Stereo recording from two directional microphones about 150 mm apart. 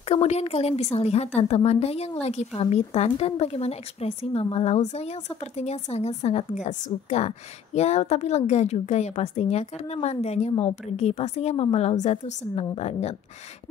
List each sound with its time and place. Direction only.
0.1 s a woman's voice: 45° left (ahead or behind)